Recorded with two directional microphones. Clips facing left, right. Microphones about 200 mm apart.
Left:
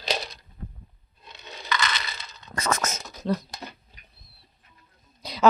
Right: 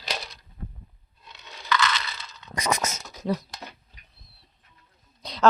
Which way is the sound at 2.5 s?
15° right (ahead or behind).